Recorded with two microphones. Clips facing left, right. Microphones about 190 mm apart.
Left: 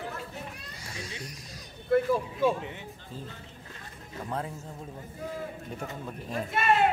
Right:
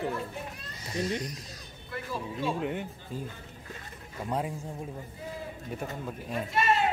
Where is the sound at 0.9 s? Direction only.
60° right (ahead or behind).